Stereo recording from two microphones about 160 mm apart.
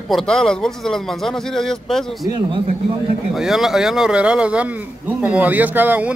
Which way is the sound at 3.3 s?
Centre (ahead or behind).